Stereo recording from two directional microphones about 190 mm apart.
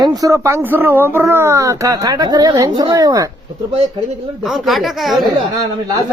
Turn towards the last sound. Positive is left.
turn(degrees=0)  # may be behind; listen again after turning